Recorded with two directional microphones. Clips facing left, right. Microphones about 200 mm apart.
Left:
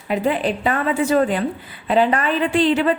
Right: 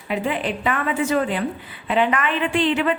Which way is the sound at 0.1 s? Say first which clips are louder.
Left 4 dB; 40° left (ahead or behind).